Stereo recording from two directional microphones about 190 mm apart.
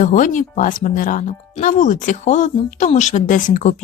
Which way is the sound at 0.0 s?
40° left (ahead or behind).